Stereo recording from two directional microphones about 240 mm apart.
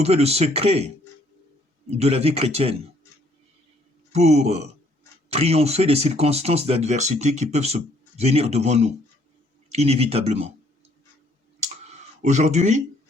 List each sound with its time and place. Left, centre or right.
0.0 s speech: right
1.9 s speech: right
4.1 s speech: right
12.2 s speech: right